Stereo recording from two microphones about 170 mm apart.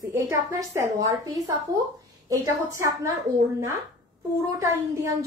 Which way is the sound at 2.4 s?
20° right (ahead or behind).